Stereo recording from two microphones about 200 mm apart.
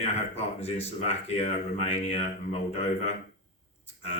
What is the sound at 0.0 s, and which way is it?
Speech, 30° left (ahead or behind).